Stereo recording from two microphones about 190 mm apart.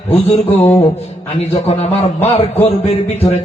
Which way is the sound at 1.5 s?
35° left (ahead or behind).